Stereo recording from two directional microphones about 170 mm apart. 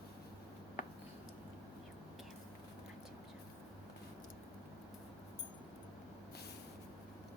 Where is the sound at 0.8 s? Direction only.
55° left (ahead or behind).